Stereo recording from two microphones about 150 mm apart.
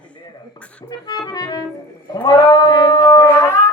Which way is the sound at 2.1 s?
30° left (ahead or behind).